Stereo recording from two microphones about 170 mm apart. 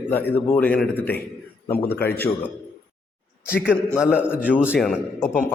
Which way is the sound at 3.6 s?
5° right (ahead or behind).